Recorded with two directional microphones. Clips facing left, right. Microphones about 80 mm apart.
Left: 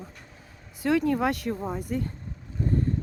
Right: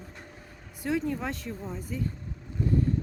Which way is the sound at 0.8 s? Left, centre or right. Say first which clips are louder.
Left 6 dB; left.